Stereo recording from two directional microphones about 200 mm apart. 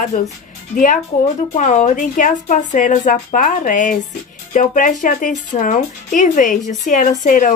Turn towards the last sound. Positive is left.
turn(degrees=40)  # may be behind; listen again after turning